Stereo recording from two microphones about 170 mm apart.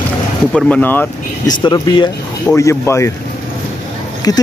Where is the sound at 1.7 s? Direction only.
25° left (ahead or behind).